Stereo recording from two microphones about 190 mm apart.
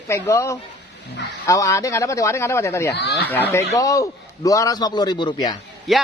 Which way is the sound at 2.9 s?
60° left (ahead or behind).